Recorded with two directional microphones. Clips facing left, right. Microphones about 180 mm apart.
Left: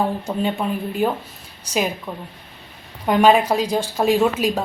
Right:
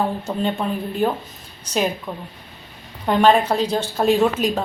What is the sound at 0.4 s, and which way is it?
Speech, 5° left (ahead or behind).